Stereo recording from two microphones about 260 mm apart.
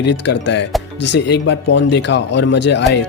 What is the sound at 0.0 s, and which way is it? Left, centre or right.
Speech, left.